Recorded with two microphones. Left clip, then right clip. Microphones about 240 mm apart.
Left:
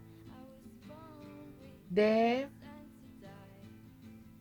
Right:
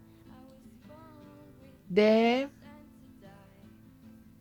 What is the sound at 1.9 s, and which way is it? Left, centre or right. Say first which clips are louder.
Speech: right 4 dB; right.